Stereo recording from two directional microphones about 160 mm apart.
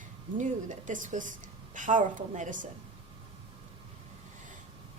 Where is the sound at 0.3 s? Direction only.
55° right (ahead or behind).